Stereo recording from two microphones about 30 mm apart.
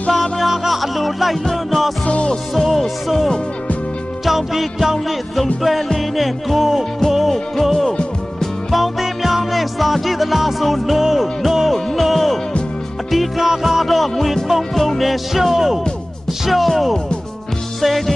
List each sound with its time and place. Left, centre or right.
0.1 s music: centre
2.0 s music: left
2.6 s music: centre
4.3 s music: centre
5.9 s music: centre
11.9 s music: centre
13.4 s music: centre
13.8 s music: centre
16.5 s music: centre